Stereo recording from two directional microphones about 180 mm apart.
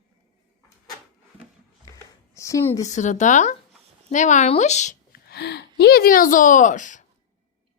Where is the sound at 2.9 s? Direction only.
40° left (ahead or behind).